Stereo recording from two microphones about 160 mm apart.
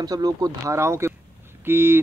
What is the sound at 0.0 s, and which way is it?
A man's voice, 25° right (ahead or behind).